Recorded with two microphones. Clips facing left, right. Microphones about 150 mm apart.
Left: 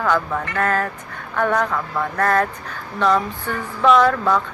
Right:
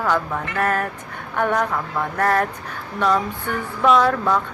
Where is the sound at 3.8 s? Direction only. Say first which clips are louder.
Left 2 dB; 5° right (ahead or behind).